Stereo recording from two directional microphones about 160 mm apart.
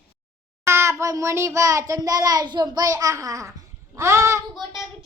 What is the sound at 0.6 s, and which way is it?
A child's voice, 15° right (ahead or behind).